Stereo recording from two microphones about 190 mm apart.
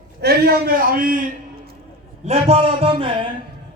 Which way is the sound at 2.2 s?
30° right (ahead or behind).